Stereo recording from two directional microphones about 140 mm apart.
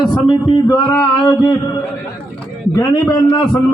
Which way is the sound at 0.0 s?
35° left (ahead or behind).